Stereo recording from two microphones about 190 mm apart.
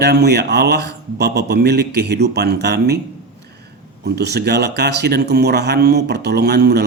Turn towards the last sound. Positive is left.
turn(degrees=-60)  # may be behind; listen again after turning